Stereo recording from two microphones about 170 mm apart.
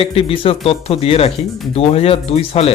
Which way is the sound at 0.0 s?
35° left (ahead or behind).